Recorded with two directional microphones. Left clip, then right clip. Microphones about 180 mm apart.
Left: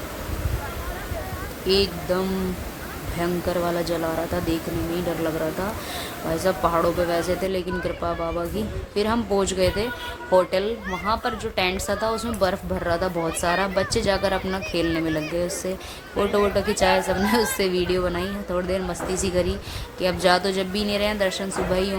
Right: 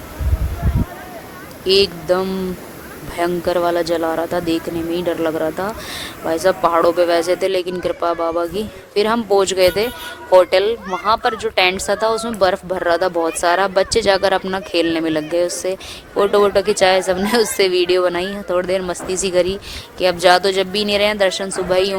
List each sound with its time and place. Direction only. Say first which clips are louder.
1.6 s a woman's voice: right 7 dB; 50° right (ahead or behind)